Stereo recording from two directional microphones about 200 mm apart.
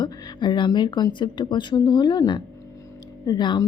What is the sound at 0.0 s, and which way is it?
A woman's voice, 25° left (ahead or behind).